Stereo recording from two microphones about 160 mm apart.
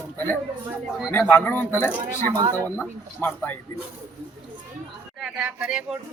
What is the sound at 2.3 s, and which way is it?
Speech, 25° right (ahead or behind).